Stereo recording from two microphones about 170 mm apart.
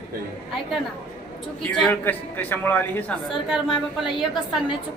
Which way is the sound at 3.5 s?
5° right (ahead or behind).